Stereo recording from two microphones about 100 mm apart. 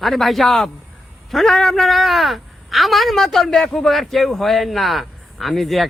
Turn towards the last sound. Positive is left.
turn(degrees=0)  # may be behind; listen again after turning